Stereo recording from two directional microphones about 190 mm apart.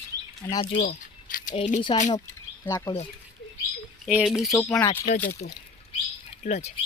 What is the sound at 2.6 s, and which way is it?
Speech, 15° left (ahead or behind).